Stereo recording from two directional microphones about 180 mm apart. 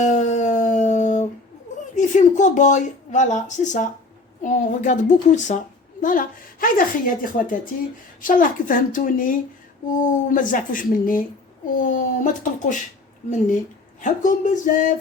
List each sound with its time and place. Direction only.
0.0 s a sound: 40° left (ahead or behind)
2.0 s a woman's voice: 45° left (ahead or behind)
14.0 s a woman's voice: 45° left (ahead or behind)